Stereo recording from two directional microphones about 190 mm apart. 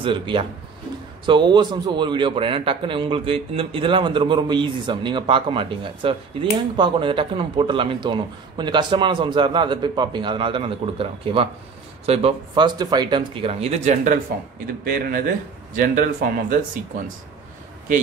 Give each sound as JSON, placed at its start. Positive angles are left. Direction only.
{"t": 0.0, "sound": "a man's voice", "side_deg": -25}
{"t": 14.9, "sound": "speech", "side_deg": -50}